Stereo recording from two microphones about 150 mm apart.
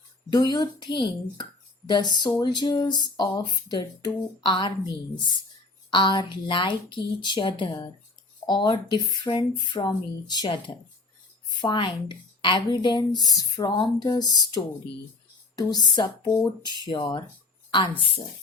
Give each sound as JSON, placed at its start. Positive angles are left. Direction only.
{"t": 0.3, "sound": "speech", "side_deg": 25}
{"t": 5.9, "sound": "a woman's voice", "side_deg": 30}
{"t": 11.6, "sound": "a woman's voice", "side_deg": 30}